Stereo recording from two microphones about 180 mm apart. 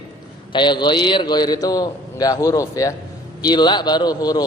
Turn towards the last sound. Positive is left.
turn(degrees=20)  # may be behind; listen again after turning